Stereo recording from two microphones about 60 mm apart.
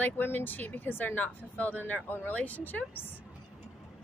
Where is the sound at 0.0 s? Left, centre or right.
Left.